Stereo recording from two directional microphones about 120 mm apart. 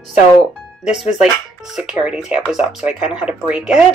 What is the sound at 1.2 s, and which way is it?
Speech, 5° right (ahead or behind).